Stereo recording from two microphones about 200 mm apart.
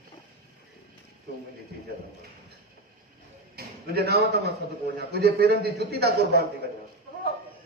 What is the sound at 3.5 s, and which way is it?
A man's voice, 50° right (ahead or behind).